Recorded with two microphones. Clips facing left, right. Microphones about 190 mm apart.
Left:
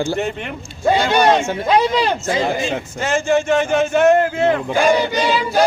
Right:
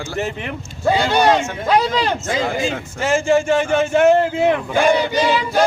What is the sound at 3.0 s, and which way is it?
Speech, 10° right (ahead or behind).